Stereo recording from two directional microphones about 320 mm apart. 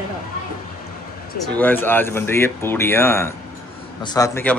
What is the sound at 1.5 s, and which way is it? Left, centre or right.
Speech, centre.